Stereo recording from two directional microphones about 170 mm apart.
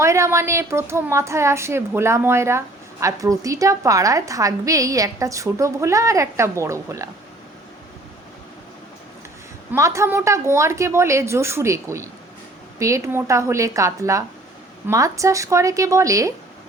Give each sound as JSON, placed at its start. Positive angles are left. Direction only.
{"t": 0.0, "sound": "speech", "side_deg": -15}
{"t": 9.7, "sound": "speech", "side_deg": -15}